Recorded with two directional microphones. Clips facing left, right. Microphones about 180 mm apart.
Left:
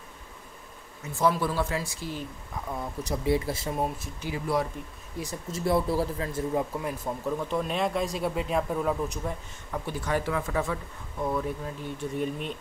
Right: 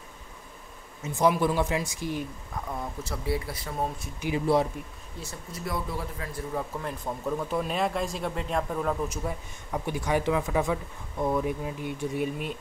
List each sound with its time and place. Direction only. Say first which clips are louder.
1.0 s speech: right 2 dB; 20° right (ahead or behind)
2.5 s speech: left 1 dB; centre (ahead or behind)
3.0 s speech: left 7 dB; 20° left (ahead or behind)
5.2 s speech: left 6 dB; 15° left (ahead or behind)
5.7 s a man's voice: left 8 dB; 30° left (ahead or behind)
6.3 s speech: left 3 dB; 15° left (ahead or behind)
9.7 s speech: right 2 dB; 15° right (ahead or behind)